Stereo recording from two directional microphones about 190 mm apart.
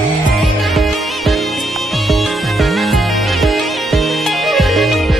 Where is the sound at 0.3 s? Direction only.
Centre (ahead or behind).